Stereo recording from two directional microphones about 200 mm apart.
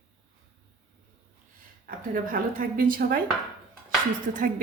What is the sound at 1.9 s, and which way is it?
A woman's voice, 45° right (ahead or behind).